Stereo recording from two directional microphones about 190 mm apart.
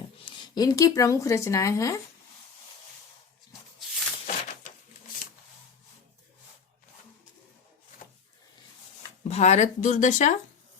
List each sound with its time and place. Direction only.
0.3 s speech: 25° left (ahead or behind)
4.3 s a sound: 40° left (ahead or behind)
9.3 s speech: 35° left (ahead or behind)